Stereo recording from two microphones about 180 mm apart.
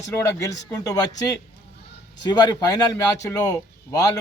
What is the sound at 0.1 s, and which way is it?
Speech, 15° left (ahead or behind).